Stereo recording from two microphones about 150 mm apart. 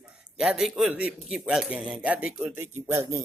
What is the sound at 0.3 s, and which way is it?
Speech, 5° right (ahead or behind).